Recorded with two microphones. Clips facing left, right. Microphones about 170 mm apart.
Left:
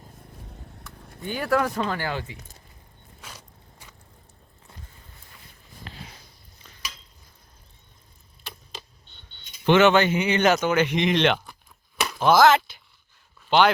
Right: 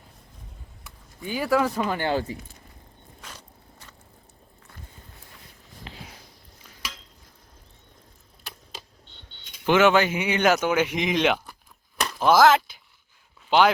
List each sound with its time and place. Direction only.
1.3 s speech: 5° right (ahead or behind)
2.0 s speech: 35° right (ahead or behind)
3.2 s walk: 10° left (ahead or behind)
5.9 s a sound: 20° right (ahead or behind)
9.0 s cricket: 90° right
9.6 s speech: 5° right (ahead or behind)